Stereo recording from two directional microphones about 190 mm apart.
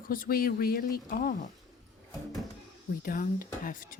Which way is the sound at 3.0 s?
45° left (ahead or behind).